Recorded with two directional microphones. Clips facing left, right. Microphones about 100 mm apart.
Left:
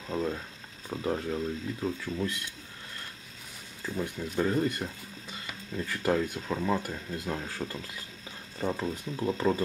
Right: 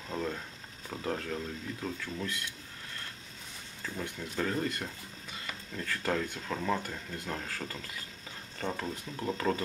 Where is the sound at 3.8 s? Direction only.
10° left (ahead or behind).